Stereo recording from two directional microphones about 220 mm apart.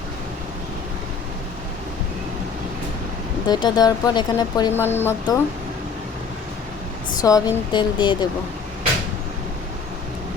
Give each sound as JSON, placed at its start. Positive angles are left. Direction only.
{"t": 3.4, "sound": "speech", "side_deg": 20}
{"t": 7.2, "sound": "speech", "side_deg": 15}